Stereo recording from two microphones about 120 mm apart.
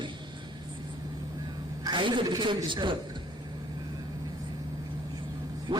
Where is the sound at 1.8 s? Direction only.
40° right (ahead or behind).